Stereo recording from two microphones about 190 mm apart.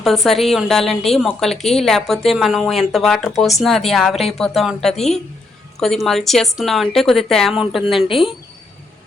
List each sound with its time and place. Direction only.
0.0 s a woman's voice: centre (ahead or behind)
8.0 s speech: 30° left (ahead or behind)